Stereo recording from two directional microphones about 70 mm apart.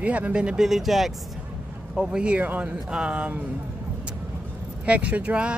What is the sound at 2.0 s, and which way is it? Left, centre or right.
Speech, centre.